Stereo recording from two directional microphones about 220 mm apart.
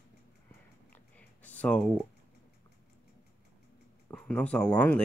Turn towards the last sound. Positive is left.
turn(degrees=5)  # may be behind; listen again after turning